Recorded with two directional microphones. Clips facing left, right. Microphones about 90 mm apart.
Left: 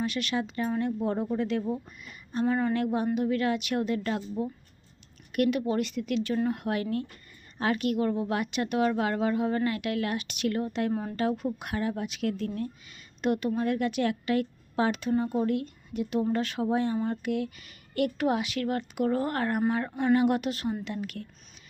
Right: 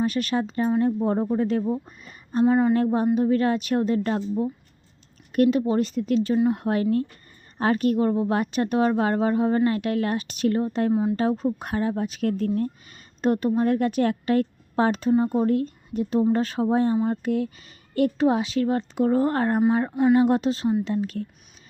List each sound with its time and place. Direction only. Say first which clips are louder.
0.0 s speech: right 6 dB; 40° right (ahead or behind)
2.4 s a sound: right 7 dB; 20° right (ahead or behind)
2.7 s speech: right 6 dB; 35° right (ahead or behind)
6.3 s speech: right 6 dB; 20° right (ahead or behind)
6.6 s speech: right 7 dB; 35° right (ahead or behind)
19.9 s a sound: right 6 dB; 10° right (ahead or behind)
20.1 s speech: right 5 dB; 30° right (ahead or behind)